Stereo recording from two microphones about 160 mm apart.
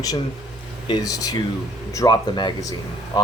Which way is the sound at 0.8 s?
25° left (ahead or behind).